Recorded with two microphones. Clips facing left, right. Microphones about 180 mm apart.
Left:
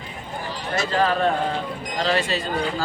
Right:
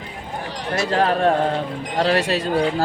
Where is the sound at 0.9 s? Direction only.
65° right (ahead or behind).